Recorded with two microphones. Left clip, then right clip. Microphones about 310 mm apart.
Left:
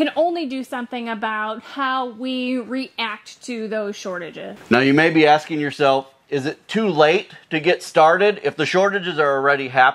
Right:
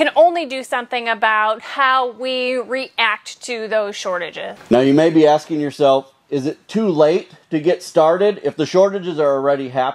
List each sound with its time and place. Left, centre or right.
0.0 s a woman's voice: right
4.6 s a man's voice: left